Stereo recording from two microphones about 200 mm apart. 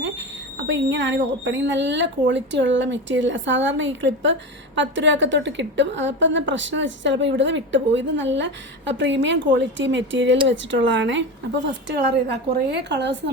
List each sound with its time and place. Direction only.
0.7 s a woman's voice: 65° right (ahead or behind)